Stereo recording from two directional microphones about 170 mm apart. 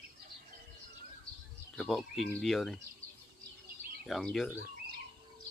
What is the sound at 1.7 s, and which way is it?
Speech, centre (ahead or behind).